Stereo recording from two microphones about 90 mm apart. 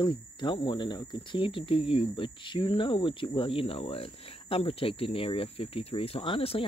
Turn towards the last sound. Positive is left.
turn(degrees=90)